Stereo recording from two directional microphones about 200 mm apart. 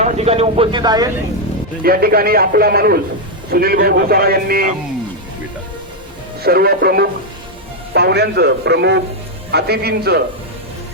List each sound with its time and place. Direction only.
0.0 s speech: 30° right (ahead or behind)
1.8 s speech: 50° right (ahead or behind)
6.4 s a man's voice: 50° right (ahead or behind)